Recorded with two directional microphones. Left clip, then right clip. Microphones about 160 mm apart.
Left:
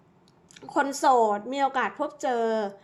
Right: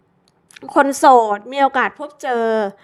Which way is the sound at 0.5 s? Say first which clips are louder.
Right 11 dB; 40° right (ahead or behind).